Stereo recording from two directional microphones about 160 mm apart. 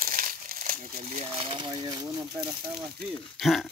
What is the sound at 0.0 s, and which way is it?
Crumpling, 60° right (ahead or behind).